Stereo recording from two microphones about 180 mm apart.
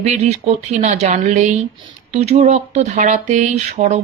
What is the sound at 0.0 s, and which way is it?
Speech, 40° right (ahead or behind).